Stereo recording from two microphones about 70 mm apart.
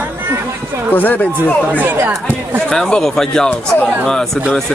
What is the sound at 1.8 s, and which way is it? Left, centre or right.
Speech, right.